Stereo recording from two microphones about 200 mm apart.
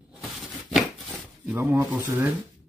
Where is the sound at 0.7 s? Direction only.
5° right (ahead or behind).